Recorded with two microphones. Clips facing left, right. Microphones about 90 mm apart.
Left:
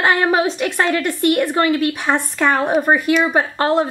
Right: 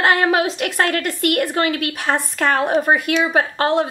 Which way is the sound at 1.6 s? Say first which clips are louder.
Left 5 dB; 60° right (ahead or behind).